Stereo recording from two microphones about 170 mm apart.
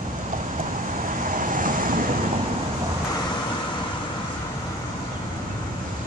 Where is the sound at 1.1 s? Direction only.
50° right (ahead or behind).